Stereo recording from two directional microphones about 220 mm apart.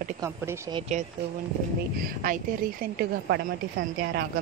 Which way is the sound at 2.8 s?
45° right (ahead or behind).